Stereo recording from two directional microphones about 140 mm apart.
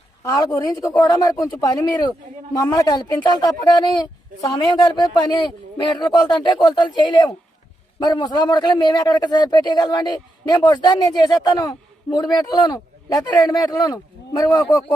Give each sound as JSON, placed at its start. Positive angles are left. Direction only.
{"t": 0.2, "sound": "a man's voice", "side_deg": 25}